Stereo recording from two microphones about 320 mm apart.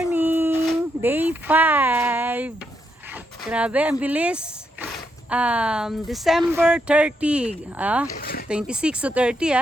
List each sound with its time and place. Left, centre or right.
0.0 s a sound: centre
3.5 s speech: centre
8.1 s speech: left
8.4 s speech: centre